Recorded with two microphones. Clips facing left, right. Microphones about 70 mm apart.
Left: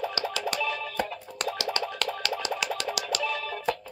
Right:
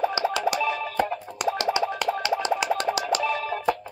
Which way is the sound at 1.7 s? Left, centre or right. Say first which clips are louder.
Right 6 dB; centre.